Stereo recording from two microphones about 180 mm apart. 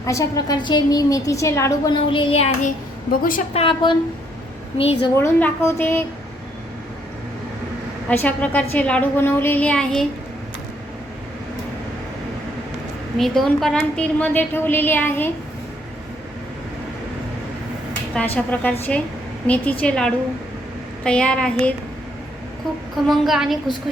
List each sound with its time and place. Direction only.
0.0 s a woman's voice: 20° left (ahead or behind)
2.0 s child singing: 30° left (ahead or behind)
3.1 s a woman's voice: 50° left (ahead or behind)
3.5 s a woman's voice: 30° left (ahead or behind)
5.1 s a woman's voice: 15° left (ahead or behind)
8.1 s a woman's voice: 10° left (ahead or behind)
13.1 s a woman's voice: centre (ahead or behind)
18.1 s a woman's voice: 5° left (ahead or behind)
23.0 s a woman's voice: centre (ahead or behind)